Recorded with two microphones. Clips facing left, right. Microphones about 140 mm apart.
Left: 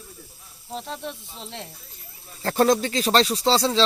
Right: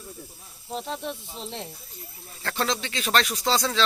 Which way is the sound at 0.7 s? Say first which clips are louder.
Right 1 dB; 5° right (ahead or behind).